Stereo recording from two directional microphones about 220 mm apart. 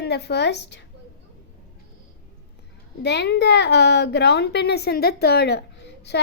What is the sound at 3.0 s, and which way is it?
A woman's voice, 50° left (ahead or behind).